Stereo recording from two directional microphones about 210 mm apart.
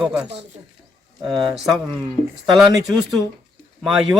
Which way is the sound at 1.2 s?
20° right (ahead or behind).